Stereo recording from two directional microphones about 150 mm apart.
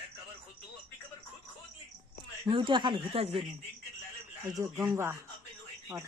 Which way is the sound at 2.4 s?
35° right (ahead or behind).